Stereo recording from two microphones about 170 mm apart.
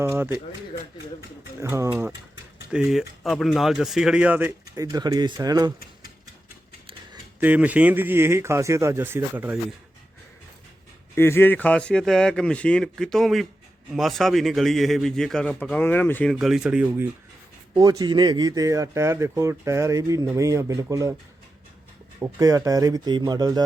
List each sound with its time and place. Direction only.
0.0 s speech: 15° right (ahead or behind)
1.6 s speech: 15° right (ahead or behind)
7.3 s speech: 10° right (ahead or behind)
11.1 s speech: 15° left (ahead or behind)
16.3 s speech: centre (ahead or behind)
17.7 s speech: 25° right (ahead or behind)
22.2 s speech: 20° right (ahead or behind)